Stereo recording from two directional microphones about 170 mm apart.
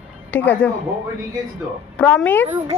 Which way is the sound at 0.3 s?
10° left (ahead or behind).